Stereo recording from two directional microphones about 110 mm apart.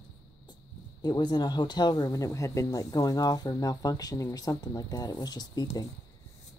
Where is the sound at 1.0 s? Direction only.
40° left (ahead or behind).